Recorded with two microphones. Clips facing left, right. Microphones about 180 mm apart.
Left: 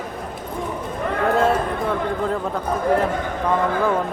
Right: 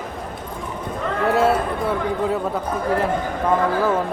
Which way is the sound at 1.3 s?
5° right (ahead or behind).